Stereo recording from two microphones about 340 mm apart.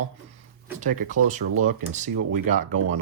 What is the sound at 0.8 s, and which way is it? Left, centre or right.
Speech, right.